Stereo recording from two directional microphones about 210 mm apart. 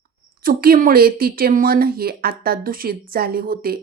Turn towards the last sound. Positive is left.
turn(degrees=-45)  # may be behind; listen again after turning